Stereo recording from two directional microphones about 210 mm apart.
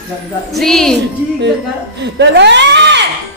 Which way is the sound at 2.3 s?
55° right (ahead or behind).